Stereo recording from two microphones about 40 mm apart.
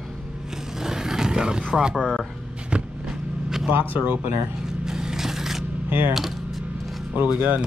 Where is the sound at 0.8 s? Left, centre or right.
Centre.